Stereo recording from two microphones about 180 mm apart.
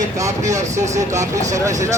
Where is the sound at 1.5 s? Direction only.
20° right (ahead or behind).